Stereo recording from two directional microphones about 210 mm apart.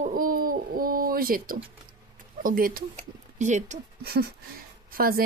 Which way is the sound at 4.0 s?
45° right (ahead or behind).